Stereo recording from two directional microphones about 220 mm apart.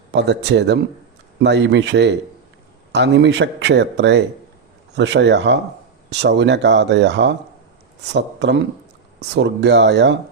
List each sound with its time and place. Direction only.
0.1 s speech: 50° right (ahead or behind)